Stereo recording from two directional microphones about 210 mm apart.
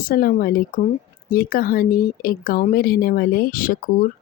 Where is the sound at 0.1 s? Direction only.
45° left (ahead or behind).